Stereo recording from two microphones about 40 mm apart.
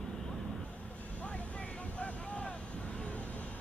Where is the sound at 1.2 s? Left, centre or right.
Left.